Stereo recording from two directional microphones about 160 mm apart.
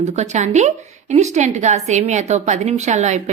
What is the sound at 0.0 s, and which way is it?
A woman's voice, 45° right (ahead or behind).